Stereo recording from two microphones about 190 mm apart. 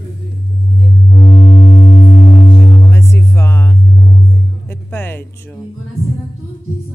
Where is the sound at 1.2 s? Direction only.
35° left (ahead or behind).